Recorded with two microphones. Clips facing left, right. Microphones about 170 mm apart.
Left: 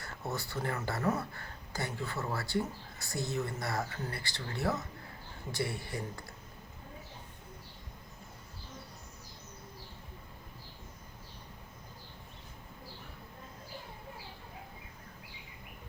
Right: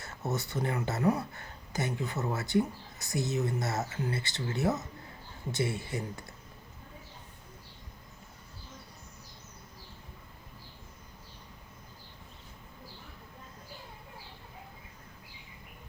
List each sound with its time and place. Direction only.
0.0 s speech: 20° right (ahead or behind)